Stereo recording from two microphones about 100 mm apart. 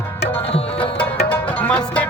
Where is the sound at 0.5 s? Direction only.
65° left (ahead or behind).